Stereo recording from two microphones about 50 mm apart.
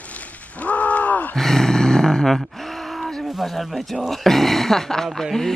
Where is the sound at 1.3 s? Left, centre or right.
Centre.